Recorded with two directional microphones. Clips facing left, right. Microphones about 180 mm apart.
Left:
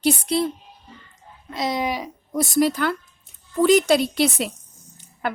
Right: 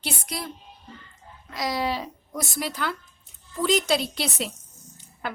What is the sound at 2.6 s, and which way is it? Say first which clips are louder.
A woman's voice: left 11 dB; 45° left (ahead or behind).